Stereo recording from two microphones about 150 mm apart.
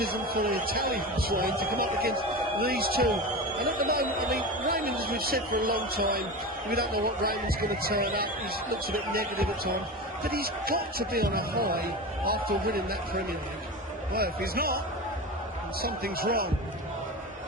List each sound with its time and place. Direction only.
0.0 s a man's voice: 80° right
15.8 s speech: 90° right